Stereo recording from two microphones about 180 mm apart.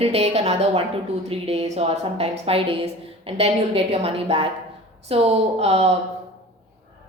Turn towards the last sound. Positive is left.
turn(degrees=-35)  # may be behind; listen again after turning